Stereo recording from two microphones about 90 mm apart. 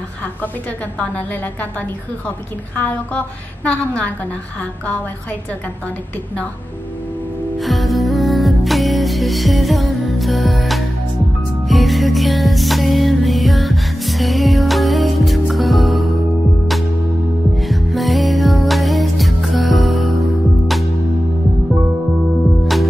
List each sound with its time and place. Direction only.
0.9 s a woman's voice: 15° left (ahead or behind)
7.5 s music: centre (ahead or behind)
17.6 s music: centre (ahead or behind)